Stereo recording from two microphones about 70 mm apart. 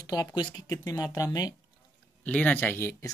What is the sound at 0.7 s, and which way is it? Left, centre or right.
Speech, left.